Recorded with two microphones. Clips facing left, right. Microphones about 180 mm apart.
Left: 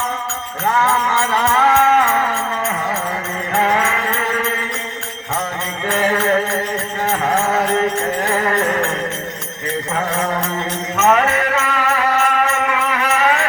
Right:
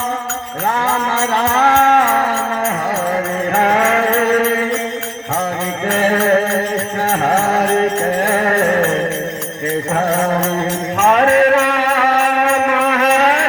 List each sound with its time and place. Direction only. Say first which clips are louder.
1.3 s music: right 2 dB; 45° right (ahead or behind)
3.5 s music: right 3 dB; 60° right (ahead or behind)
4.1 s mantra: right 8 dB; 50° right (ahead or behind)
6.0 s music: right 3 dB; 50° right (ahead or behind)
9.9 s music: right 5 dB; 45° right (ahead or behind)